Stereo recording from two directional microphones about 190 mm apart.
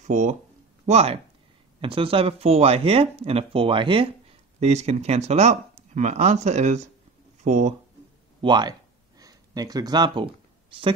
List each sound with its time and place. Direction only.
0.0 s speech: 40° right (ahead or behind)
8.4 s speech: 25° right (ahead or behind)